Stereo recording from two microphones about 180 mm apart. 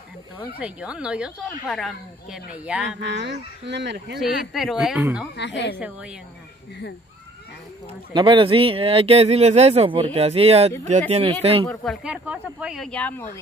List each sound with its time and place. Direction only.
0.6 s a woman's voice: 5° right (ahead or behind)
3.1 s speech: 70° right (ahead or behind)
4.2 s a woman's voice: centre (ahead or behind)
5.3 s a woman's voice: 75° left (ahead or behind)
5.8 s a woman's voice: 5° right (ahead or behind)
8.1 s speech: 25° right (ahead or behind)
11.6 s a woman's voice: 5° left (ahead or behind)